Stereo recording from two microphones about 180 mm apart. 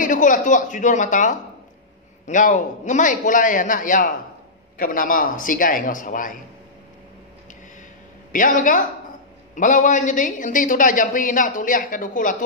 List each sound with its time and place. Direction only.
0.0 s a woman's voice: 45° left (ahead or behind)
8.3 s a woman's voice: 45° left (ahead or behind)